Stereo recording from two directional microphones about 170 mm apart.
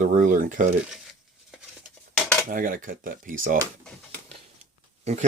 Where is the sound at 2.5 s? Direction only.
55° right (ahead or behind).